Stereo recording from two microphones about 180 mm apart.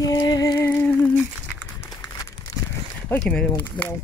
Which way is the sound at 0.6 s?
5° left (ahead or behind).